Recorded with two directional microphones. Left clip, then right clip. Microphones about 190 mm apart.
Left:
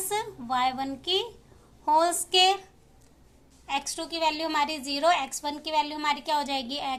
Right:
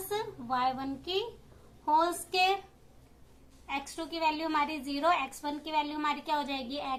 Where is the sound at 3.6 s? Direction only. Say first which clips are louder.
Left 6 dB; 40° left (ahead or behind).